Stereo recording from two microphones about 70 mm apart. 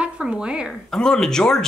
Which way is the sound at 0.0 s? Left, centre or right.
Centre.